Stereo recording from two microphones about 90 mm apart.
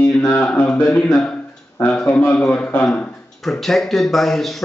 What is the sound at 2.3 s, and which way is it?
Speech, 15° left (ahead or behind).